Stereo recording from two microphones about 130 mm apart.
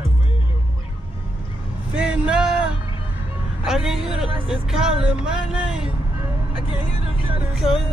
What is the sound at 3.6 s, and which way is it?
Speech, 5° right (ahead or behind).